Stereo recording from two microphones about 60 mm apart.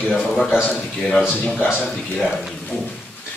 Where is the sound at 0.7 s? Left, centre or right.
Centre.